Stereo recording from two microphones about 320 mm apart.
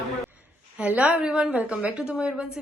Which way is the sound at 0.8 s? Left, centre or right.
Centre.